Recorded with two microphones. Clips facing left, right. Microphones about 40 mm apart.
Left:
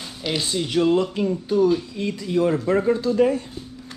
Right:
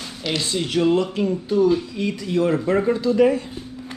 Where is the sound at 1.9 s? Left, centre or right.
Right.